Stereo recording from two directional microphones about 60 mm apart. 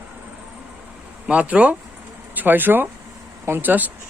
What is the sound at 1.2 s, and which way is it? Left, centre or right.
Speech, centre.